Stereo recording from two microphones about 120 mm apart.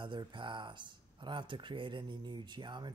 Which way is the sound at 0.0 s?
40° right (ahead or behind).